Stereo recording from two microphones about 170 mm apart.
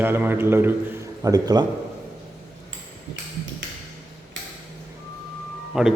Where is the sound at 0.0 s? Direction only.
10° right (ahead or behind).